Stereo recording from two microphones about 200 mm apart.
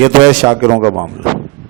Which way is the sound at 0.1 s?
25° right (ahead or behind).